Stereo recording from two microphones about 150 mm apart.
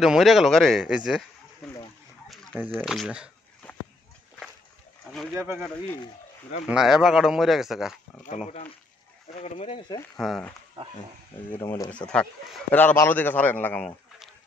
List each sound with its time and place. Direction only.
0.0 s a man's voice: centre (ahead or behind)
1.6 s a sound: centre (ahead or behind)
2.7 s a man's voice: centre (ahead or behind)
3.6 s a sound: 10° left (ahead or behind)
5.3 s speech: 15° right (ahead or behind)
6.6 s a man's voice: 5° right (ahead or behind)
9.3 s speech: 45° left (ahead or behind)
10.1 s a man's voice: centre (ahead or behind)
11.5 s speech: 20° left (ahead or behind)
11.9 s a man's voice: 5° left (ahead or behind)